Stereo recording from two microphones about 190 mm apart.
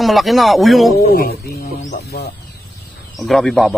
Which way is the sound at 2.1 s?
55° left (ahead or behind).